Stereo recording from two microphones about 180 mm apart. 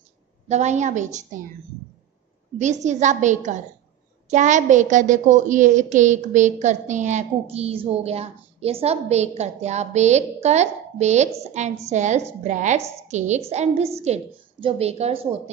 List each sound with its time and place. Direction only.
0.5 s a woman's voice: 40° right (ahead or behind)
2.6 s a woman's voice: 40° right (ahead or behind)